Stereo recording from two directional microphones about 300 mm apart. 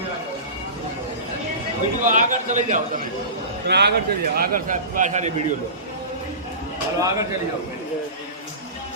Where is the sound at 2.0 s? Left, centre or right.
Right.